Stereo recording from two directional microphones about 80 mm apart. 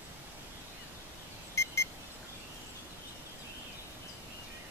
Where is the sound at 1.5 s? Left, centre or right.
Left.